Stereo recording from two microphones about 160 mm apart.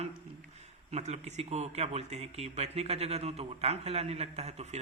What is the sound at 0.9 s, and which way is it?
Speech, 45° right (ahead or behind).